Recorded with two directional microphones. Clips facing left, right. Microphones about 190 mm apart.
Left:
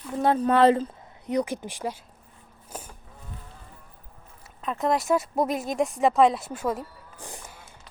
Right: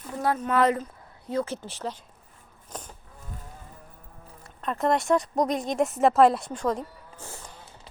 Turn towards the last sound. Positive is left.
turn(degrees=15)  # may be behind; listen again after turning